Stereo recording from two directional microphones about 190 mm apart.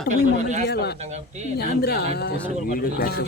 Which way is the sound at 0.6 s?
60° left (ahead or behind).